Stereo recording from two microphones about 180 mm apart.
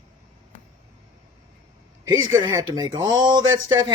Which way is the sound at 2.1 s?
20° right (ahead or behind).